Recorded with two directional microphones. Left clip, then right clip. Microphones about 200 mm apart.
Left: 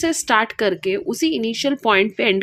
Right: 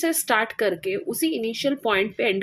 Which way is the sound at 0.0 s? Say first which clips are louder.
Left 4 dB; 25° left (ahead or behind).